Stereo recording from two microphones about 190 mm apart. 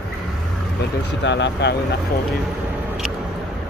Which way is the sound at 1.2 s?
70° left (ahead or behind).